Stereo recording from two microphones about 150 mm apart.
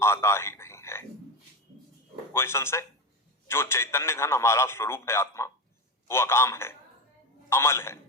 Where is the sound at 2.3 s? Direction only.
15° left (ahead or behind).